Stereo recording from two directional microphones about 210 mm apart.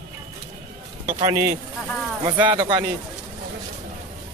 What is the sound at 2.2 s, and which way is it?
Speech, 20° right (ahead or behind).